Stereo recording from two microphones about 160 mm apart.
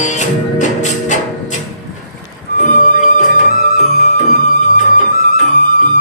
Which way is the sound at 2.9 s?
50° left (ahead or behind).